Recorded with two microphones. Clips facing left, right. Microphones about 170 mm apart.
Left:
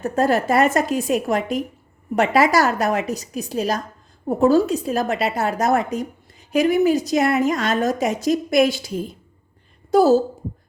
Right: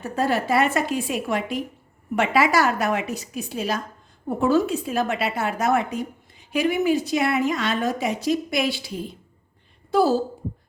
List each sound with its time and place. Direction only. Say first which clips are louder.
0.0 s a woman's voice: left 4 dB; 45° left (ahead or behind)
9.9 s a woman's voice: left 5 dB; 45° left (ahead or behind)